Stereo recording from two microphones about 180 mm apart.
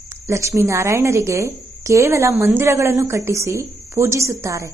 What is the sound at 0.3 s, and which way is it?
A woman's voice, 15° right (ahead or behind).